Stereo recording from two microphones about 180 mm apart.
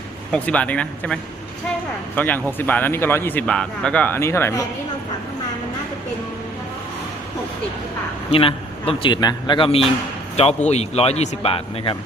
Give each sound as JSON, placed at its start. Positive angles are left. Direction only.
{"t": 0.3, "sound": "speech", "side_deg": 5}
{"t": 8.3, "sound": "speech", "side_deg": 30}